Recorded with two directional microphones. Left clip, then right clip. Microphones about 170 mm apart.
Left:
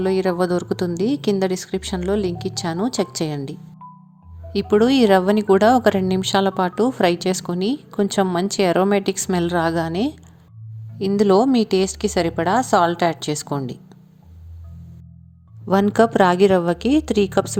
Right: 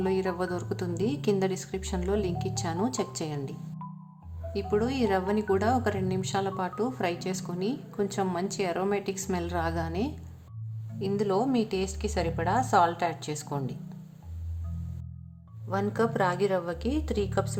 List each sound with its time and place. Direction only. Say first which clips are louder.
0.0 s a woman's voice: left 9 dB; 35° left (ahead or behind)
4.5 s a woman's voice: left 12 dB; 45° left (ahead or behind)
11.2 s a woman's voice: left 12 dB; 40° left (ahead or behind)
15.6 s a woman's voice: left 12 dB; 50° left (ahead or behind)